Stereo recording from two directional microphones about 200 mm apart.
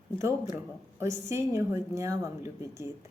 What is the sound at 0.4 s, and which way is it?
A woman's voice, 10° right (ahead or behind).